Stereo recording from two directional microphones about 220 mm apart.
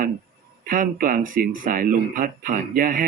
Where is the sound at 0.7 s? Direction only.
40° right (ahead or behind).